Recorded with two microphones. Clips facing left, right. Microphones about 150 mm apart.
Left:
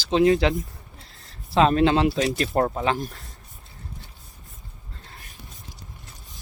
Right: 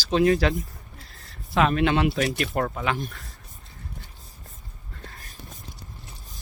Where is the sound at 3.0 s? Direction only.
45° left (ahead or behind).